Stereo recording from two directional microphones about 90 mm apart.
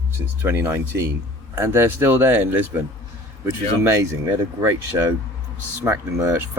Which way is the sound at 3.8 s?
25° right (ahead or behind).